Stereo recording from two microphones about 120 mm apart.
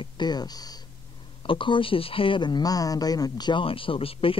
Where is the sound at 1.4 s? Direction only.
45° left (ahead or behind).